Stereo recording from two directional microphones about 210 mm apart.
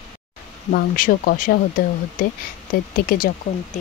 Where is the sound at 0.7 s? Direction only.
40° left (ahead or behind).